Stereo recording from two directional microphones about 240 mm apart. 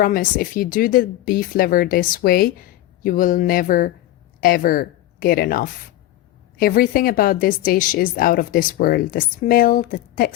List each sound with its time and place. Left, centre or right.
0.0 s a woman's voice: left